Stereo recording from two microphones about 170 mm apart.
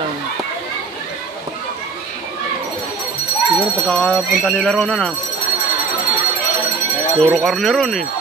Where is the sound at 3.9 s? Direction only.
5° left (ahead or behind).